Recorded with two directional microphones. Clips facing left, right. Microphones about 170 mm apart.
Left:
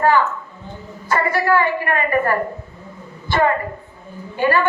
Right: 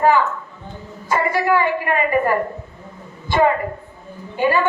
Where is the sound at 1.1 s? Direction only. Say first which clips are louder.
Even; 20° right (ahead or behind).